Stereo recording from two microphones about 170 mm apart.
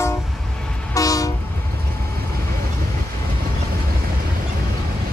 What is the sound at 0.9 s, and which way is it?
Train, 20° left (ahead or behind).